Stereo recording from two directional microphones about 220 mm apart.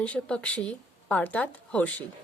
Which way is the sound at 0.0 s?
5° left (ahead or behind).